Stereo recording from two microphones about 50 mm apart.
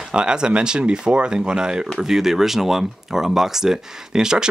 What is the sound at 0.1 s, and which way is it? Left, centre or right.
Speech, centre.